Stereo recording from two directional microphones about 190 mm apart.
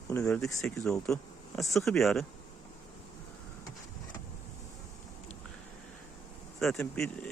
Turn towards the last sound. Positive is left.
turn(degrees=5)  # may be behind; listen again after turning